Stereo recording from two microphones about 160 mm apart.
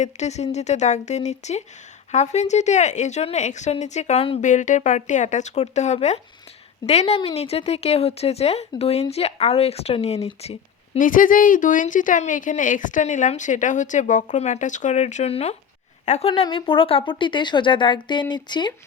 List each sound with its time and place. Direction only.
0.0 s speech: 45° left (ahead or behind)
4.4 s speech: 50° left (ahead or behind)
10.9 s speech: 55° left (ahead or behind); by 18.7 s 30° left (ahead or behind)